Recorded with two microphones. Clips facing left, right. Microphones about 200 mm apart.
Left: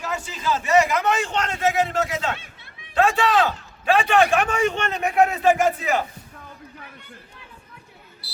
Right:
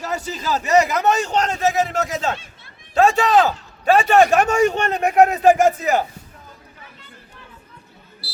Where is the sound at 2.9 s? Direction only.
40° right (ahead or behind).